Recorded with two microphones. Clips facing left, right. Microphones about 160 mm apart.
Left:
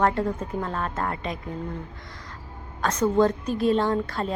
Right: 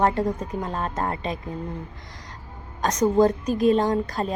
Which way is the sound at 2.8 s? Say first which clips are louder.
Right 2 dB; 15° right (ahead or behind).